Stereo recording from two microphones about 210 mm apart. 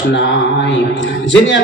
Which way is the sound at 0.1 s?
60° left (ahead or behind).